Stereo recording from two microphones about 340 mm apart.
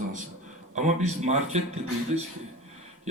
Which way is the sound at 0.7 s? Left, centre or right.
Centre.